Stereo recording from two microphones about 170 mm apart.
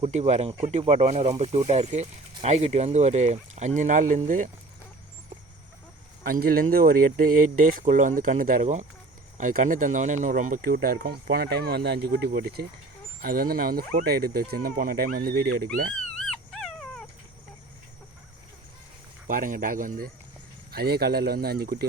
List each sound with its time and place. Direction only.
0.0 s speech: 40° right (ahead or behind)
6.2 s speech: 60° right (ahead or behind)
16.1 s dog: 5° left (ahead or behind)
19.3 s speech: 55° right (ahead or behind)
20.7 s speech: 70° right (ahead or behind)